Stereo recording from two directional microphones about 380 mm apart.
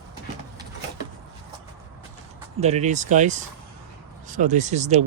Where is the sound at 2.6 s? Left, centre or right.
Centre.